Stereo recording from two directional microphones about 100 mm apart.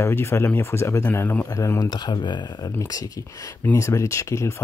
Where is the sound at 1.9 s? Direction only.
45° left (ahead or behind).